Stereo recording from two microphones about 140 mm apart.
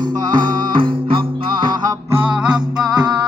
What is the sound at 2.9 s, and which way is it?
Music, 30° right (ahead or behind).